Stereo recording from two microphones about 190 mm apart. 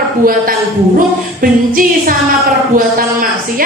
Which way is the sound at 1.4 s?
45° right (ahead or behind).